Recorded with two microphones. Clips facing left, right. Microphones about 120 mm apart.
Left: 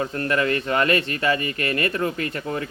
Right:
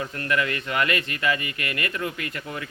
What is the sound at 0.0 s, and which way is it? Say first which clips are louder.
Speech: left 4 dB; 35° left (ahead or behind).